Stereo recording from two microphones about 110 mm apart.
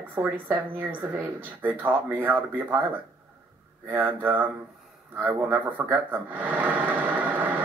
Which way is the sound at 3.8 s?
15° right (ahead or behind).